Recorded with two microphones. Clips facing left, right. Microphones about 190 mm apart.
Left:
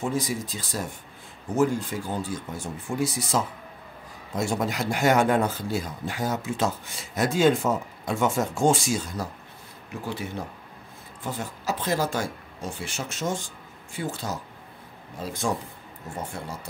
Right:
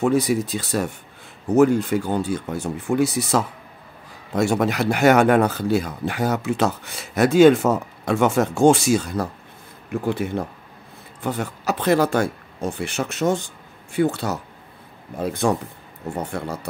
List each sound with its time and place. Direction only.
0.0 s speech: 65° right (ahead or behind)
11.2 s speech: 65° right (ahead or behind)